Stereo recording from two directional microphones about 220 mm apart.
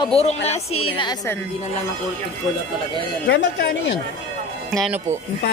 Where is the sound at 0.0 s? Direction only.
25° left (ahead or behind).